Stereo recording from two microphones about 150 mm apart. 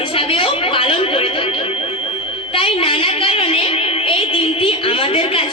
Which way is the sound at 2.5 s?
35° left (ahead or behind).